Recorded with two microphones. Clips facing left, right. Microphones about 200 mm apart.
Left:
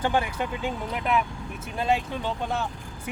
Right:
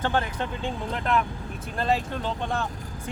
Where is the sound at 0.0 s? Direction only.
10° left (ahead or behind).